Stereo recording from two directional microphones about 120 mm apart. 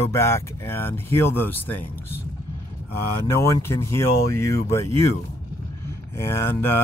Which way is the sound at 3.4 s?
20° left (ahead or behind).